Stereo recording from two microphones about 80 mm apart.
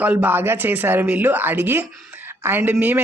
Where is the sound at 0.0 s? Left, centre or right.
Centre.